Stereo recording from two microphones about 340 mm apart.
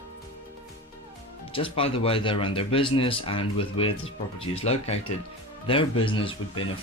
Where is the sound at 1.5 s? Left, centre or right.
Centre.